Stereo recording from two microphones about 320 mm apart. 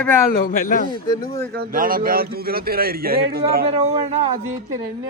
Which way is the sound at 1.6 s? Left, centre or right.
Right.